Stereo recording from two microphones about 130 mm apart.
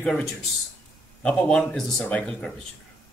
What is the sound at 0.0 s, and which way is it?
Speech, centre (ahead or behind).